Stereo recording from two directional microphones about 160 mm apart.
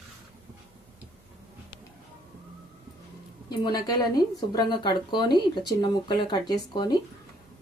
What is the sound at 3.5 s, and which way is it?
Speech, 25° left (ahead or behind).